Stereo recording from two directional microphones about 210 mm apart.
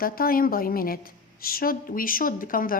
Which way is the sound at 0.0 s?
45° left (ahead or behind).